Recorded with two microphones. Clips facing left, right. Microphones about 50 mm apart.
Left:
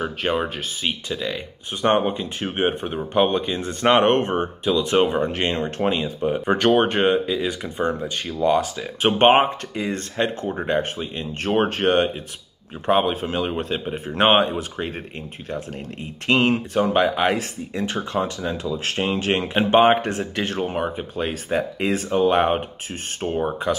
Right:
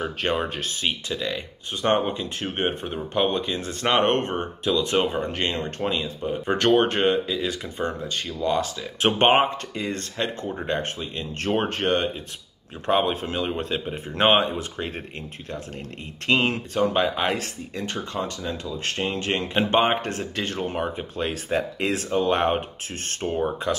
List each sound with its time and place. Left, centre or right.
0.0 s speech: centre
1.8 s speech: left
5.4 s speech: left
6.0 s speech: left
6.4 s speech: centre
9.0 s speech: centre